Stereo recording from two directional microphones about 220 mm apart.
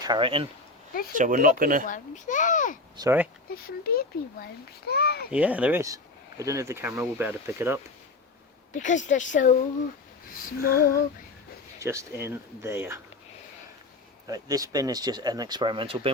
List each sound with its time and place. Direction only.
0.0 s speech: 20° right (ahead or behind)
1.1 s speech: 35° right (ahead or behind)
1.9 s speech: 35° left (ahead or behind)
3.0 s speech: 10° right (ahead or behind)
3.5 s a child's voice: 40° left (ahead or behind)
5.3 s speech: 5° right (ahead or behind)
8.7 s speech: 35° left (ahead or behind)
10.6 s a child's voice: 45° left (ahead or behind)
11.8 s speech: 15° right (ahead or behind)
14.3 s speech: 15° right (ahead or behind)